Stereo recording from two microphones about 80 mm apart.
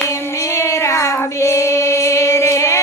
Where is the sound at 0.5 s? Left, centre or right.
Left.